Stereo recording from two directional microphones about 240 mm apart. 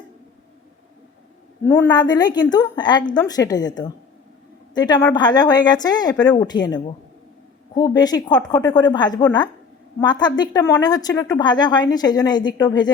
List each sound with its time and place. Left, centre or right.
1.6 s a woman's voice: centre